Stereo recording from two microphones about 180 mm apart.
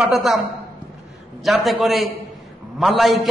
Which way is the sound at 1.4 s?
Centre (ahead or behind).